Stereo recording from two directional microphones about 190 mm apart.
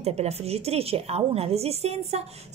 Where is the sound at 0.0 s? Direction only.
35° right (ahead or behind).